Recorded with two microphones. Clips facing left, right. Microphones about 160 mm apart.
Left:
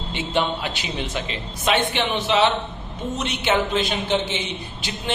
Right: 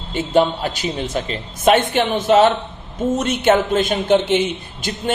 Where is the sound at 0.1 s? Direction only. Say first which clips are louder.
Right 7 dB; 40° right (ahead or behind).